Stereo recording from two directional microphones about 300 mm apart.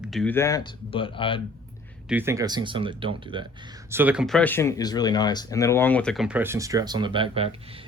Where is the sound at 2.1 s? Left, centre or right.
Centre.